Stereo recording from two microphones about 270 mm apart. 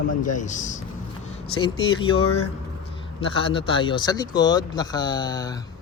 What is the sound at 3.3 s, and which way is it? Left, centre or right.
A man's voice, centre.